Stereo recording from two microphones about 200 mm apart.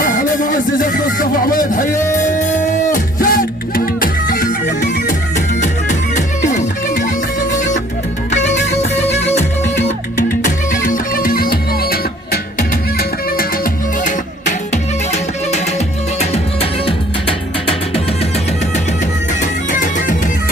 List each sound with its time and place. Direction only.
0.0 s music: 40° left (ahead or behind)
8.3 s music: 35° left (ahead or behind)
10.2 s music: 40° left (ahead or behind)
14.0 s music: 35° left (ahead or behind)
19.7 s music: 40° left (ahead or behind)